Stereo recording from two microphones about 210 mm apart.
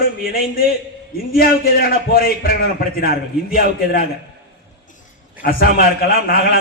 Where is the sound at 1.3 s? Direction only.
45° left (ahead or behind).